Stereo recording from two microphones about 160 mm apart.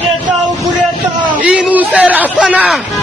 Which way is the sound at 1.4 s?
10° right (ahead or behind).